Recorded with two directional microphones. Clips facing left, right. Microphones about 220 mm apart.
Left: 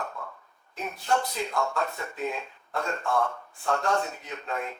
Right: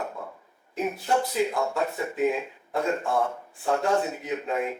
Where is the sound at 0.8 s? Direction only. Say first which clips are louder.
Right 3 dB; 10° right (ahead or behind).